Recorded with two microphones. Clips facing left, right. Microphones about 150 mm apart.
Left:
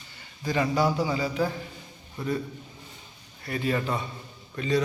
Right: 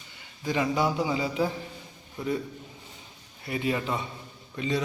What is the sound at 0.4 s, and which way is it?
Speech, 5° right (ahead or behind).